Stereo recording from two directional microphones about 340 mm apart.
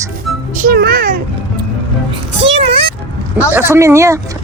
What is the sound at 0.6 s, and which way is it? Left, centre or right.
Speech, right.